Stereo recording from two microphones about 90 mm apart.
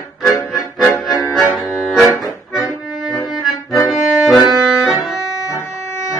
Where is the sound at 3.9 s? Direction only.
5° right (ahead or behind).